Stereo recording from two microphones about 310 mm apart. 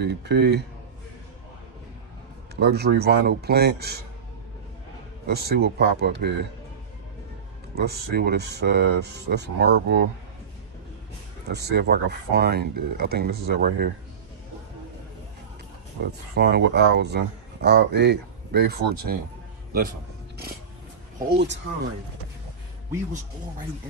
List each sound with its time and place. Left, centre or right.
0.0 s speech: right
2.5 s speech: right
5.2 s speech: right
7.7 s speech: right
11.4 s speech: right
16.0 s speech: right
21.3 s speech: right